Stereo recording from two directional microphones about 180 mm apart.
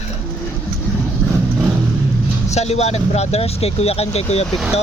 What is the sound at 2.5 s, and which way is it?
Speech, 40° left (ahead or behind).